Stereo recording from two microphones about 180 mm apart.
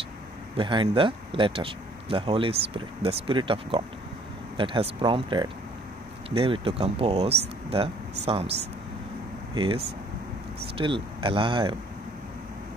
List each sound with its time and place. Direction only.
0.6 s speech: 30° right (ahead or behind)
9.5 s speech: 30° right (ahead or behind)
10.8 s speech: 30° right (ahead or behind)